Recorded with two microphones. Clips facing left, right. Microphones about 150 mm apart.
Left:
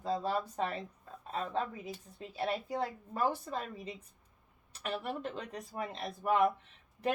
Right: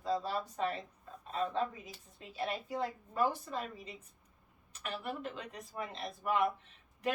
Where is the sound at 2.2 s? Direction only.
35° left (ahead or behind).